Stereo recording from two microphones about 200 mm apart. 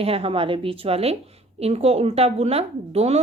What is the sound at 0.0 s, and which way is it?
A woman's voice, 30° right (ahead or behind).